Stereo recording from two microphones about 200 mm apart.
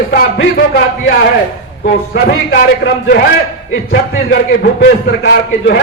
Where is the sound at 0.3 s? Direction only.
75° left (ahead or behind).